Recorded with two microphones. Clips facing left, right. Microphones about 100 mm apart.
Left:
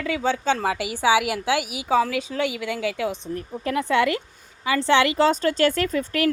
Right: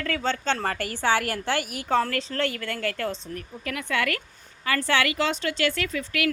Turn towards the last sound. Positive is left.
turn(degrees=40)  # may be behind; listen again after turning